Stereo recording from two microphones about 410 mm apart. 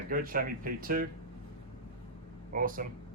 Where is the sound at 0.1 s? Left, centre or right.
Right.